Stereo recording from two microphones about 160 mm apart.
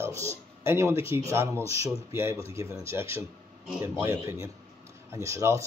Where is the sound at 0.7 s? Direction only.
15° right (ahead or behind).